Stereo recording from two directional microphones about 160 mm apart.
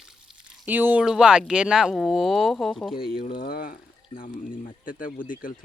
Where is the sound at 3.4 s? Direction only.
70° left (ahead or behind).